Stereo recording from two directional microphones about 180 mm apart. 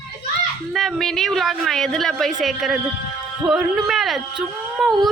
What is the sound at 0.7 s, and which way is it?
A woman's voice, centre (ahead or behind).